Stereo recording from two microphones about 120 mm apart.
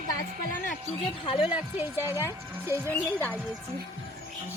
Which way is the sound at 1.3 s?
50° left (ahead or behind).